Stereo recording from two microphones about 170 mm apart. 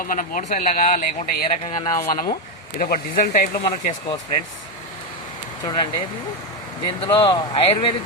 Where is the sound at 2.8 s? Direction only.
55° left (ahead or behind).